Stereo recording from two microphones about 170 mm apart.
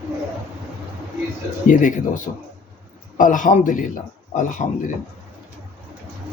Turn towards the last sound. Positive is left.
turn(degrees=45)  # may be behind; listen again after turning